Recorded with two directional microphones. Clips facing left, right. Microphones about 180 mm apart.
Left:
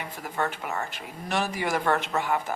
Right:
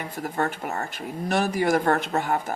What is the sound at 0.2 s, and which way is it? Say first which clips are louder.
A woman's voice: right 3 dB; 45° right (ahead or behind).